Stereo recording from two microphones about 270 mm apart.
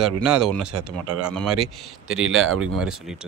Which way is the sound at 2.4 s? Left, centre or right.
Right.